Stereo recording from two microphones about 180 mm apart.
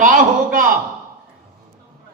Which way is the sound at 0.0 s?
50° right (ahead or behind).